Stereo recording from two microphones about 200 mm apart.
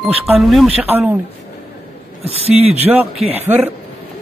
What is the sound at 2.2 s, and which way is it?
Speech, 30° right (ahead or behind).